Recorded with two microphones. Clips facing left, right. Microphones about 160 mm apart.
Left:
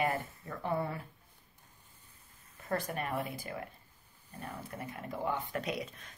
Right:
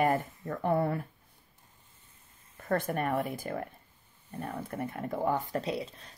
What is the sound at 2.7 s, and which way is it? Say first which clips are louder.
A woman's voice: right 6 dB; 55° right (ahead or behind).